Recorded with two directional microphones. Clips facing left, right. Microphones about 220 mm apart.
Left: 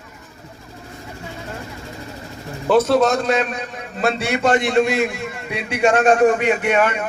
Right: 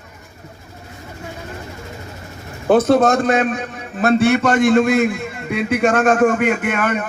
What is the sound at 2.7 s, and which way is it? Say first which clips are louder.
A man's voice: right 2 dB; 50° right (ahead or behind).